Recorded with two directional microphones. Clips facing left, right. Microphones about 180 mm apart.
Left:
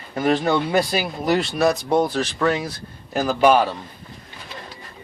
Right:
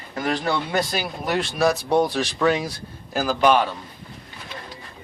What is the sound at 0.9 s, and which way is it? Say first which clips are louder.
Speech: left 4 dB; 5° left (ahead or behind).